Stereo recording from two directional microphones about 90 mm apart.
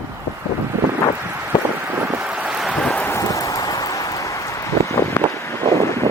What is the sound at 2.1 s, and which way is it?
Wind, 10° right (ahead or behind).